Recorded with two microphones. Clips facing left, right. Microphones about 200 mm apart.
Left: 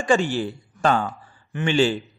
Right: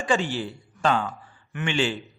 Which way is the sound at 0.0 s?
45° left (ahead or behind).